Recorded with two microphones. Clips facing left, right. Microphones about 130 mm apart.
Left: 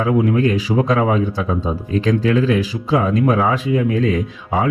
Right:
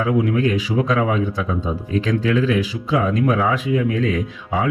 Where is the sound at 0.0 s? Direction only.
35° left (ahead or behind).